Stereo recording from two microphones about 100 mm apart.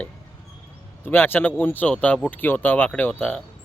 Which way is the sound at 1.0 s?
20° left (ahead or behind).